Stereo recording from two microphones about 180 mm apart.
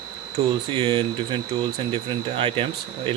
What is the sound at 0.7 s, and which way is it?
Speech, 25° right (ahead or behind).